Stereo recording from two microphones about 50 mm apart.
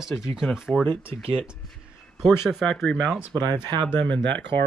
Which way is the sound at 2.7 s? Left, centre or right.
Centre.